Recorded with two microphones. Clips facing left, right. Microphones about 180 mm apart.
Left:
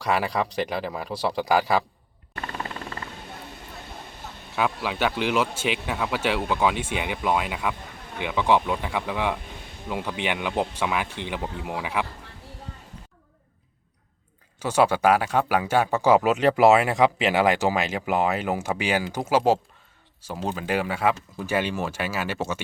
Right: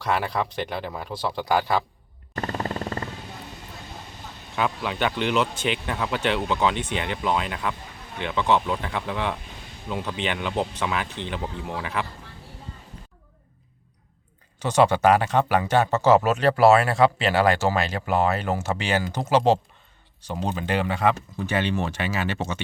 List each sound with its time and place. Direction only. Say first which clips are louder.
0.0 s speech: left 1 dB; centre (ahead or behind)
2.3 s a sound: right 5 dB; 40° right (ahead or behind)
4.5 s speech: even; 5° left (ahead or behind)
14.6 s speech: right 1 dB; 5° left (ahead or behind)